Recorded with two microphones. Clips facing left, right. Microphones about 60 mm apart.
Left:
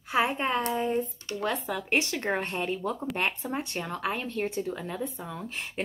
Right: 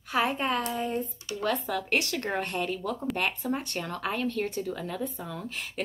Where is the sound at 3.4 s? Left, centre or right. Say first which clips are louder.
Right 1 dB; centre.